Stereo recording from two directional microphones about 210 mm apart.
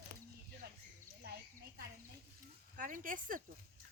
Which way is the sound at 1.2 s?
45° right (ahead or behind).